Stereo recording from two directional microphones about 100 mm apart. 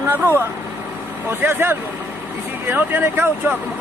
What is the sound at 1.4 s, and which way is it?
Speech, 20° right (ahead or behind).